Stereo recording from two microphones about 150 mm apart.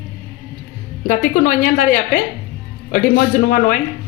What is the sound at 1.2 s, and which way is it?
Speech, 65° left (ahead or behind).